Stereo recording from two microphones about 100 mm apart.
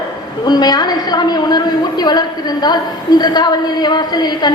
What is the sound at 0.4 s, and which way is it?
A woman's voice, 45° left (ahead or behind).